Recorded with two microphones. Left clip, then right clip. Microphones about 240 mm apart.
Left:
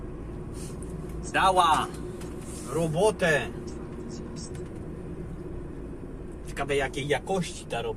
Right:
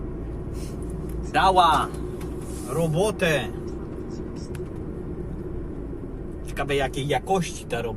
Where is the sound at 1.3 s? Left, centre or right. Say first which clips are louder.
Right 4 dB; centre.